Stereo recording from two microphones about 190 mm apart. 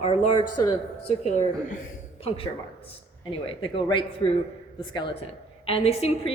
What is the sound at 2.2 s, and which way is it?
A woman's voice, 30° left (ahead or behind).